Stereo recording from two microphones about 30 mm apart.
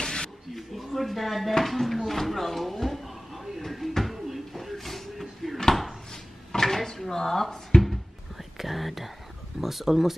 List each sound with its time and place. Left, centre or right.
0.0 s a sound: left
0.6 s speech: centre
1.6 s music: centre
4.0 s a sound: centre
6.5 s drawer open or close: centre
9.6 s speech: centre